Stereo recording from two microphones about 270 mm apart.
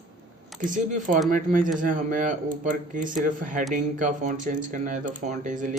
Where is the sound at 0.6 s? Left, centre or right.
Right.